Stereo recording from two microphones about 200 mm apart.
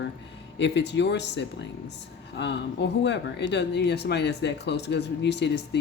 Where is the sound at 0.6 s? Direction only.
60° left (ahead or behind).